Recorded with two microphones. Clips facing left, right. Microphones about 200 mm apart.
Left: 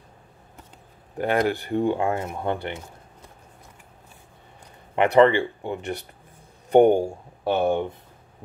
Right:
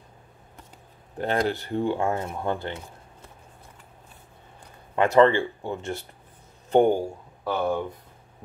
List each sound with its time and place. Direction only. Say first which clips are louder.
1.1 s speech: left 3 dB; 10° left (ahead or behind)
4.9 s speech: left 1 dB; 15° left (ahead or behind)